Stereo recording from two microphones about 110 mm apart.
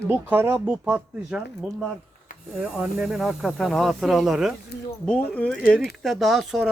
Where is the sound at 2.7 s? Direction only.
5° right (ahead or behind).